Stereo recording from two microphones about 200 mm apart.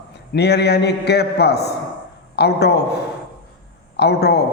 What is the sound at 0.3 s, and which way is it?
A man's voice, 55° left (ahead or behind).